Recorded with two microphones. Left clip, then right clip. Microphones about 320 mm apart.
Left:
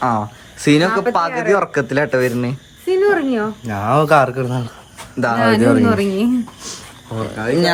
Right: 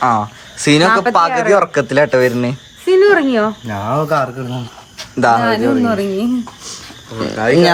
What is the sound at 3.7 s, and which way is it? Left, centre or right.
Speech, centre.